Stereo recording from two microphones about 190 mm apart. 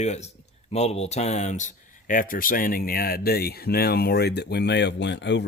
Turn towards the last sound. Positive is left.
turn(degrees=65)  # may be behind; listen again after turning